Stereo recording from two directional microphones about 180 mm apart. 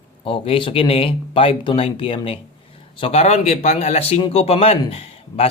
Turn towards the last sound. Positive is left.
turn(degrees=35)  # may be behind; listen again after turning